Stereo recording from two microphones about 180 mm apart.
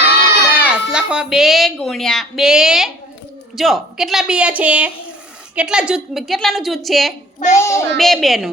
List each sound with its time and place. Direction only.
0.5 s a woman's voice: 5° right (ahead or behind)
7.3 s a child's voice: 40° left (ahead or behind)
7.6 s a child's voice: 15° left (ahead or behind)
7.9 s a woman's voice: centre (ahead or behind)